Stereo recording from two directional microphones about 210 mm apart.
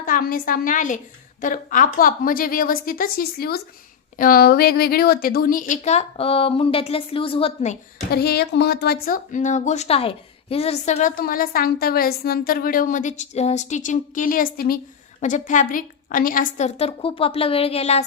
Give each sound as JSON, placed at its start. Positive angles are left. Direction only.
{"t": 0.0, "sound": "a woman's voice", "side_deg": 40}
{"t": 8.1, "sound": "a woman's voice", "side_deg": 50}